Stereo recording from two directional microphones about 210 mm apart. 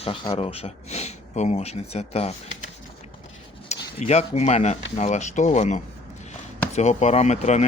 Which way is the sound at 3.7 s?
30° left (ahead or behind).